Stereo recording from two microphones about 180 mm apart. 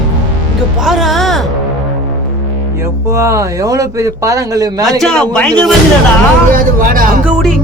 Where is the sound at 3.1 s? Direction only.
15° right (ahead or behind).